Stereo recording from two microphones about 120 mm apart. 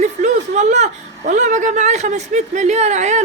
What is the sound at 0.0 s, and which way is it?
Speech, 75° right (ahead or behind).